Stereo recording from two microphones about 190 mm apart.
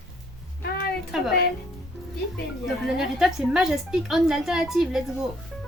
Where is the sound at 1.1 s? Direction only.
Centre (ahead or behind).